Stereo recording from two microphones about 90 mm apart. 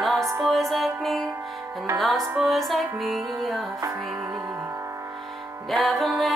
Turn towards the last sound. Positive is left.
turn(degrees=0)  # may be behind; listen again after turning